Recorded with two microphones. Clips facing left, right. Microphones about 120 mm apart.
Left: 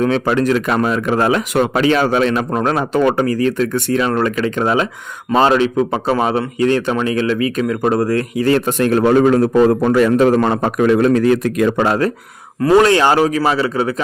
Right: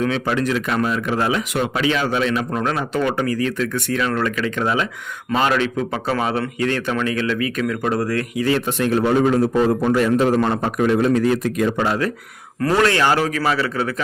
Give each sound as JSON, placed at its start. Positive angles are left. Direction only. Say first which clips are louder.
{"t": 0.0, "sound": "speech", "louder": "left 5 dB", "side_deg": 45}
{"t": 8.4, "sound": "a man's voice", "louder": "left 5 dB", "side_deg": 50}
{"t": 12.7, "sound": "speech", "louder": "left 6 dB", "side_deg": 25}